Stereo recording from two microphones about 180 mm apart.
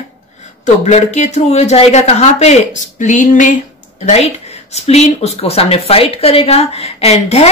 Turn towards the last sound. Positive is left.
turn(degrees=35)  # may be behind; listen again after turning